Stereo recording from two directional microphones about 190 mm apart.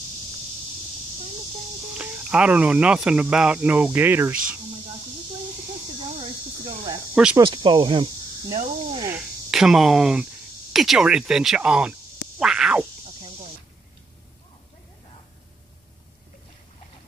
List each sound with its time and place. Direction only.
2.0 s speech: 5° right (ahead or behind)
6.1 s cricket: 30° right (ahead or behind)
7.3 s speech: 25° right (ahead or behind)
9.1 s speech: centre (ahead or behind)
12.4 s a sound: 5° right (ahead or behind)